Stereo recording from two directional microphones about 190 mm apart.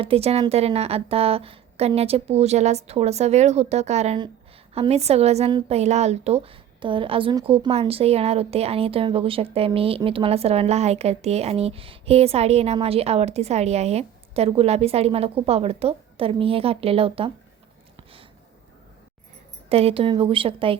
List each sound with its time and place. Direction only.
0.0 s a woman's voice: 30° right (ahead or behind)
19.7 s speech: 30° right (ahead or behind)